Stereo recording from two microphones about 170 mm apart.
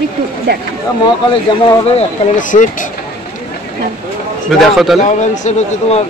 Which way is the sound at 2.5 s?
50° left (ahead or behind).